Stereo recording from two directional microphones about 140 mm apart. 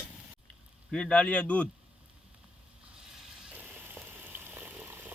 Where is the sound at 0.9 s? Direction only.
5° left (ahead or behind).